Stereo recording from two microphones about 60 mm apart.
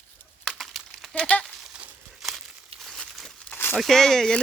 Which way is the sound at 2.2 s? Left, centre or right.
Centre.